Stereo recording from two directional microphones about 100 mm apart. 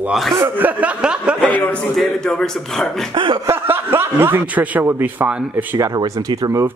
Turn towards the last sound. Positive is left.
turn(degrees=-35)  # may be behind; listen again after turning